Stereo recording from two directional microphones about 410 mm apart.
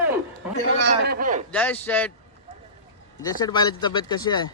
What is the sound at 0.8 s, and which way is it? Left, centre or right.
Speech, right.